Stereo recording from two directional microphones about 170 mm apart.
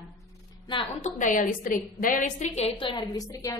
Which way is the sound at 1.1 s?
50° left (ahead or behind).